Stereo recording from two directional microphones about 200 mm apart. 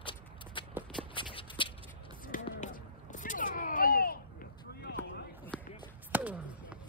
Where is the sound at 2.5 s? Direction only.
40° left (ahead or behind).